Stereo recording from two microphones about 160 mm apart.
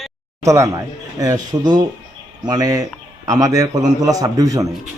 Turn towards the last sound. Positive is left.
turn(degrees=-20)  # may be behind; listen again after turning